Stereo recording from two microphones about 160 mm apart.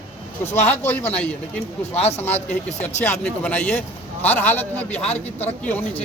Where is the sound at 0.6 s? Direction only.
10° left (ahead or behind).